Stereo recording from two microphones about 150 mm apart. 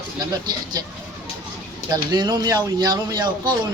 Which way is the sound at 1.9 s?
30° right (ahead or behind).